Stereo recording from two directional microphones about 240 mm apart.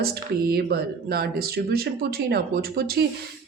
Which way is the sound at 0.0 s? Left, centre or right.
Right.